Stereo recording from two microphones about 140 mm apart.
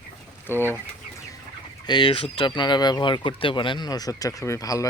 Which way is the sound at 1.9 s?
35° left (ahead or behind).